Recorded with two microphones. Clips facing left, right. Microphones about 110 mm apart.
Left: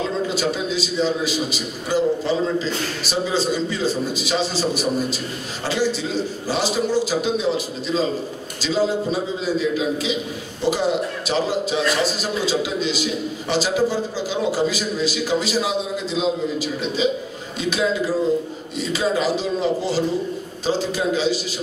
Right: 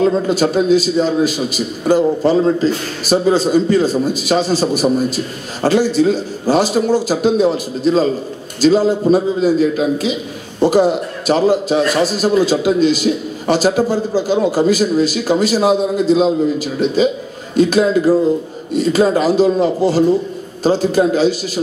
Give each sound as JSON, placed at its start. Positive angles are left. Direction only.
{"t": 0.0, "sound": "a man's voice", "side_deg": -50}